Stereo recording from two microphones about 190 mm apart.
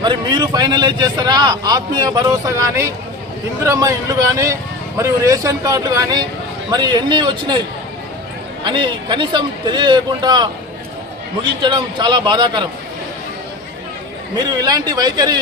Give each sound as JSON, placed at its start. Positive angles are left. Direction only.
{"t": 0.0, "sound": "a man's voice", "side_deg": -25}
{"t": 8.6, "sound": "a man's voice", "side_deg": -25}
{"t": 11.6, "sound": "a man's voice", "side_deg": -25}
{"t": 14.3, "sound": "a man's voice", "side_deg": -20}